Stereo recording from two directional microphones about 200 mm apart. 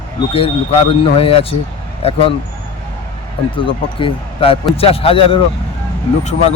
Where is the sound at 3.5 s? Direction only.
25° left (ahead or behind).